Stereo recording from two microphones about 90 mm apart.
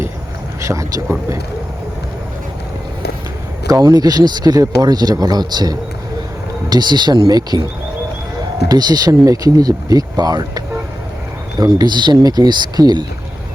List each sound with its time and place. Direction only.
0.6 s speech: 35° right (ahead or behind)
3.7 s speech: 45° right (ahead or behind)
8.6 s speech: 50° right (ahead or behind)
11.6 s speech: 50° right (ahead or behind)